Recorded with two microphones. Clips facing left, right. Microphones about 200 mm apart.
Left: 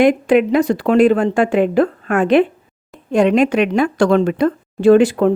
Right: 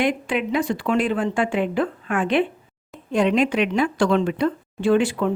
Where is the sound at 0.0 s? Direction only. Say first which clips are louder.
Left 10 dB; 45° left (ahead or behind).